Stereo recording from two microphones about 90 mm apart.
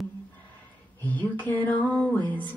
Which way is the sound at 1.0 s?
20° left (ahead or behind).